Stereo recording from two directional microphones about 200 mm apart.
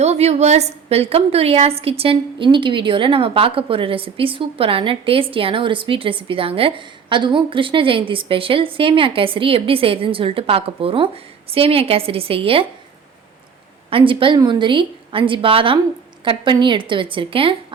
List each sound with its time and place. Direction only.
0.0 s a woman's voice: 35° right (ahead or behind)
13.9 s a woman's voice: 25° right (ahead or behind)